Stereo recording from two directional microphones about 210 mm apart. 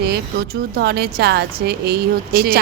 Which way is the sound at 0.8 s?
50° right (ahead or behind).